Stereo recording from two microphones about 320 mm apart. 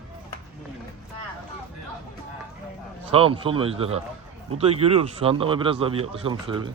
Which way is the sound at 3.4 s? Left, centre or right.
Centre.